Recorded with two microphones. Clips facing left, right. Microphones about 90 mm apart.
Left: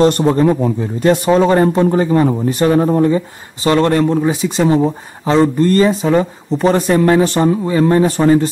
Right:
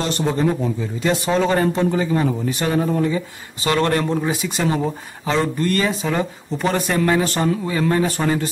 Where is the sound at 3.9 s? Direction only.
5° left (ahead or behind).